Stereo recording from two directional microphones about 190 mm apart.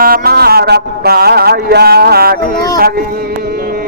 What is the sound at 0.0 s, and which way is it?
Speech, 50° right (ahead or behind).